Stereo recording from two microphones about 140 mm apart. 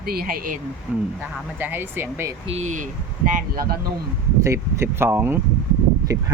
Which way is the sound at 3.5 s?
90° right.